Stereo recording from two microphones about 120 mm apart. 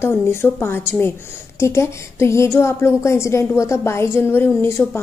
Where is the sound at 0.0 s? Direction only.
20° left (ahead or behind).